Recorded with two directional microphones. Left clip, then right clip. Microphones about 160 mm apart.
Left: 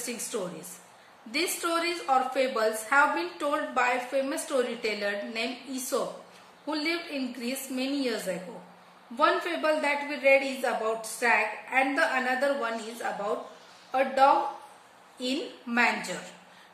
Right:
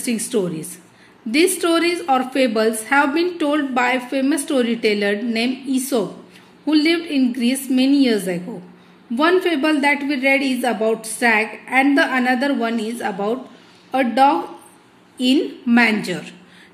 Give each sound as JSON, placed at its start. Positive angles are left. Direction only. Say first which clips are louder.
{"t": 0.3, "sound": "a woman's voice", "louder": "right 14 dB", "side_deg": -50}